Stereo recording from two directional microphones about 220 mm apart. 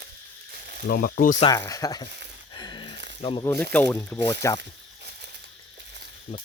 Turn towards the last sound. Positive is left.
turn(degrees=30)  # may be behind; listen again after turning